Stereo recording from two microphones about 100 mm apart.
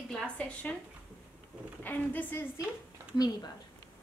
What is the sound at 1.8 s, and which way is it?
Speech, 20° left (ahead or behind).